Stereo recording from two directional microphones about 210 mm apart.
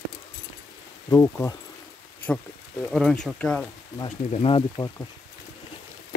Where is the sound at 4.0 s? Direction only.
25° left (ahead or behind).